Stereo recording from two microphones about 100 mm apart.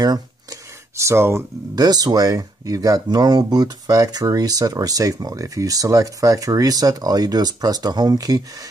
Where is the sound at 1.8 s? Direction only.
40° right (ahead or behind).